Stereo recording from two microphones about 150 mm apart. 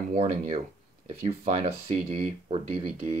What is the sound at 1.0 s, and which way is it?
Speech, 45° right (ahead or behind).